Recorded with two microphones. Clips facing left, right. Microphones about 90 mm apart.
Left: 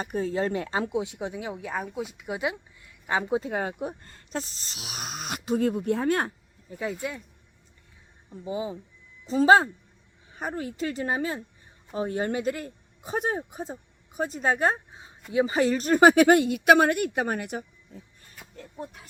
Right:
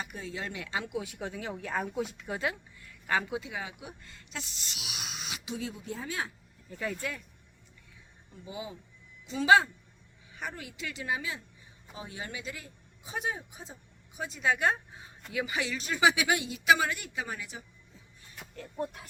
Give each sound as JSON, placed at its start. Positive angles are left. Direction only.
{"t": 0.0, "sound": "speech", "side_deg": 40}
{"t": 0.9, "sound": "speech", "side_deg": 20}
{"t": 3.3, "sound": "speech", "side_deg": 45}
{"t": 6.7, "sound": "speech", "side_deg": 15}
{"t": 8.3, "sound": "speech", "side_deg": 35}
{"t": 18.6, "sound": "speech", "side_deg": 0}